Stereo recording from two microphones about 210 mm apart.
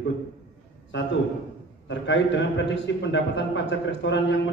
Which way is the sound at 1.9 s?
60° left (ahead or behind).